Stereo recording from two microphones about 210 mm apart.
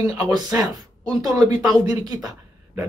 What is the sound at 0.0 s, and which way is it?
Speech, 15° right (ahead or behind).